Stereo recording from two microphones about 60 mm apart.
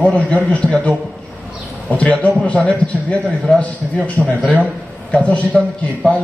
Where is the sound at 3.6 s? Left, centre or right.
Left.